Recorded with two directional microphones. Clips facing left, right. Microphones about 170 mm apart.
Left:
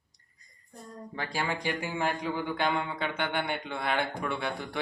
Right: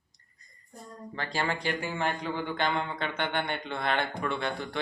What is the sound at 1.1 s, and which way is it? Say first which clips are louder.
Speech: right 1 dB; 10° left (ahead or behind).